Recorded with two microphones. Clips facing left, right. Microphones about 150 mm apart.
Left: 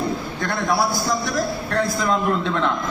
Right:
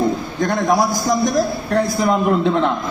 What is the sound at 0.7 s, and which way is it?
A man's voice, 40° right (ahead or behind).